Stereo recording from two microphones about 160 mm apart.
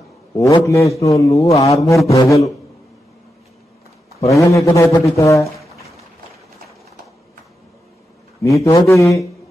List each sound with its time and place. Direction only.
0.6 s a man's voice: 20° left (ahead or behind)
1.5 s mantra: 40° left (ahead or behind)
2.0 s a man's voice: 20° left (ahead or behind)
4.2 s a man's voice: 20° left (ahead or behind)
8.4 s a man's voice: 20° left (ahead or behind)